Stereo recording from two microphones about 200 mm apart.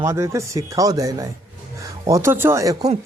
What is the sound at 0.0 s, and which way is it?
Speech, 15° right (ahead or behind).